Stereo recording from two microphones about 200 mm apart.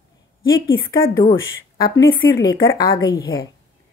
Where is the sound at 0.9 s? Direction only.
20° left (ahead or behind).